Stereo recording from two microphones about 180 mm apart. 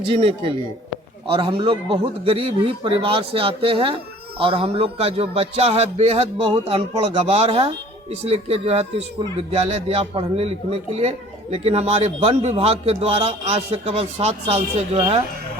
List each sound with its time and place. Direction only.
0.0 s speech: 30° right (ahead or behind)